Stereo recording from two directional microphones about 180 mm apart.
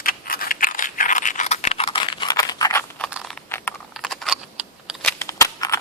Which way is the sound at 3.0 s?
5° right (ahead or behind).